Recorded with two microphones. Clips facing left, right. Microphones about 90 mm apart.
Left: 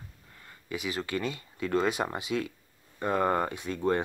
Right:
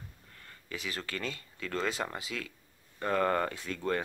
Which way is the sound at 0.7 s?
10° left (ahead or behind).